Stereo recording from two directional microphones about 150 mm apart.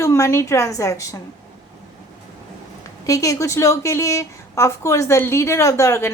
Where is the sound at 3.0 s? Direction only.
20° left (ahead or behind).